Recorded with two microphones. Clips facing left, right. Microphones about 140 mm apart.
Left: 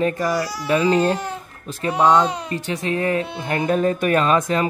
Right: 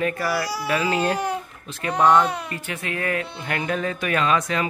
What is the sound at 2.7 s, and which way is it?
Speech, 30° left (ahead or behind).